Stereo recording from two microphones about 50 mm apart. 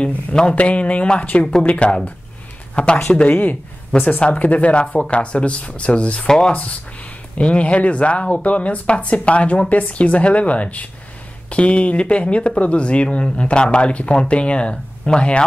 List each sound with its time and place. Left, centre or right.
0.3 s speech: centre
3.3 s speech: left